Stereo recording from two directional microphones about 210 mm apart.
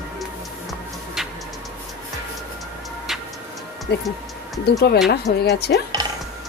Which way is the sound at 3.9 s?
55° left (ahead or behind).